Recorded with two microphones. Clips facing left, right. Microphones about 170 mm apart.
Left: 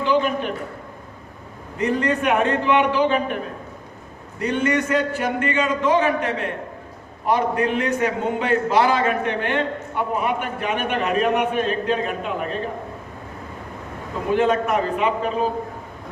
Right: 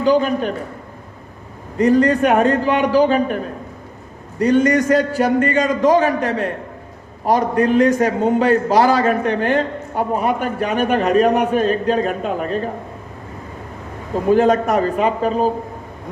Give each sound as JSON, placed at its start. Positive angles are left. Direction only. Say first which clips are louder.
{"t": 0.0, "sound": "a man's voice", "louder": "right 5 dB", "side_deg": -40}
{"t": 1.8, "sound": "a man's voice", "louder": "right 7 dB", "side_deg": -35}
{"t": 14.3, "sound": "a man's voice", "louder": "right 5 dB", "side_deg": -40}